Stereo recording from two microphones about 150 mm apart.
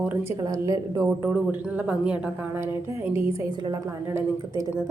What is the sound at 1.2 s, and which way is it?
A woman's voice, 10° right (ahead or behind).